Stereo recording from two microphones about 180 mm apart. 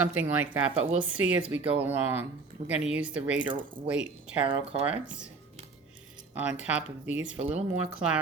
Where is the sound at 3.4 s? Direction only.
25° right (ahead or behind).